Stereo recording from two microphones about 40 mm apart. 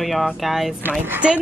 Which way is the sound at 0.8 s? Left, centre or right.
Right.